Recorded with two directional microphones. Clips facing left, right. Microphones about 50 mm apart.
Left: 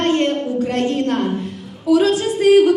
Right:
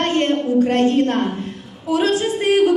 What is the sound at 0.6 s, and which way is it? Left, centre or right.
Speech, right.